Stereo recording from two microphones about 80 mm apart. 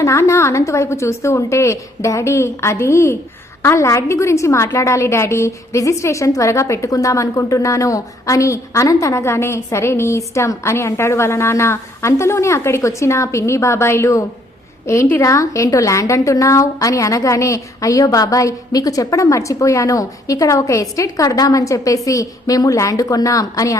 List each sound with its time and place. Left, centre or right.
0.0 s a woman's voice: left